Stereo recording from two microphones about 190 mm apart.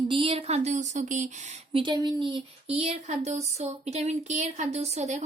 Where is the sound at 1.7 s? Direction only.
20° right (ahead or behind).